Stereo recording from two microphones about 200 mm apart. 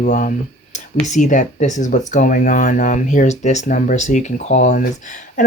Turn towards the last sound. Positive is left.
turn(degrees=40)  # may be behind; listen again after turning